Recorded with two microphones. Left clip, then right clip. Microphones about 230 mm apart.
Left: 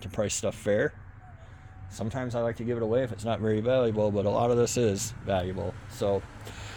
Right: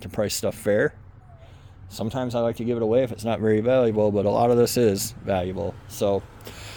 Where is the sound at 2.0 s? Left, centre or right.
Right.